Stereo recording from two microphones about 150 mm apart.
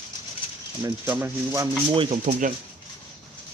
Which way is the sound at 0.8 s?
15° right (ahead or behind).